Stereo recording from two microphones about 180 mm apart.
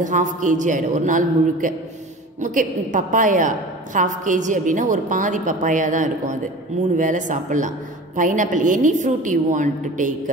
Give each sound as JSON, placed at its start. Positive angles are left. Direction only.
{"t": 0.0, "sound": "a woman's voice", "side_deg": -45}